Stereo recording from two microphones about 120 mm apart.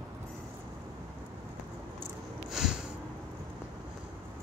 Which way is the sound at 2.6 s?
5° right (ahead or behind).